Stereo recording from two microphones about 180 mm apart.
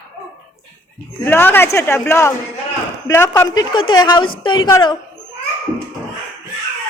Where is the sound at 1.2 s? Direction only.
10° left (ahead or behind).